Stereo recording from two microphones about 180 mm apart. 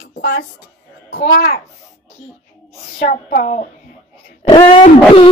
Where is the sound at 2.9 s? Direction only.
50° left (ahead or behind).